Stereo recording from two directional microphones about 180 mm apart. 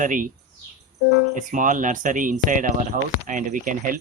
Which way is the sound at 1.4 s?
45° right (ahead or behind).